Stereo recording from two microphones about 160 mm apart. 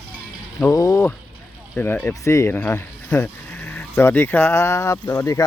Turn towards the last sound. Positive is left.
turn(degrees=15)  # may be behind; listen again after turning